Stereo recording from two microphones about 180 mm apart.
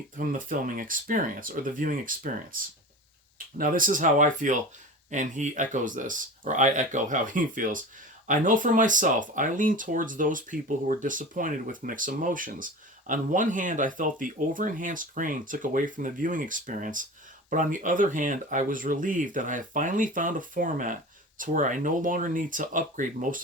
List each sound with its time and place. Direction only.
0.2 s speech: 50° right (ahead or behind)